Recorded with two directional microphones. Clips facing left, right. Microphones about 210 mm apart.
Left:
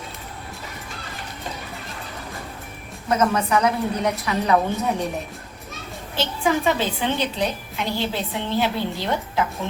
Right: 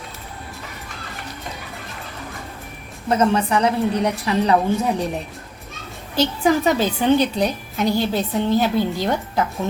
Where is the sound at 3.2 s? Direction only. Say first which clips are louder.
Right 2 dB; 30° right (ahead or behind).